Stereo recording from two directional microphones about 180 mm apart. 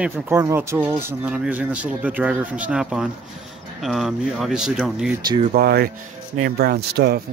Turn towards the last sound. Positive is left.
turn(degrees=-65)  # may be behind; listen again after turning